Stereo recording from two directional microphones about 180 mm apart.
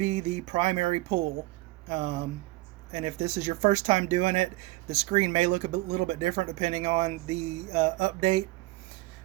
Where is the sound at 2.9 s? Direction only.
35° right (ahead or behind).